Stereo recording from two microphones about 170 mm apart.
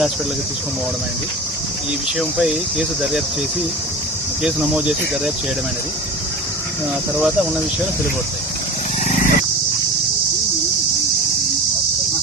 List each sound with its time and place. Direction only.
2.1 s speech: 5° right (ahead or behind)
4.4 s speech: 5° right (ahead or behind)
9.0 s dog: 50° left (ahead or behind)